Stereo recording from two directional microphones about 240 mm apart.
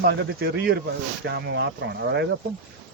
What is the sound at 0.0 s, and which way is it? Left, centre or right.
A man's voice, right.